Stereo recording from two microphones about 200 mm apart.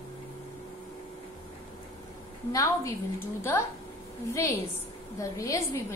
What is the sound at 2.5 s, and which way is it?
Speech, 15° left (ahead or behind).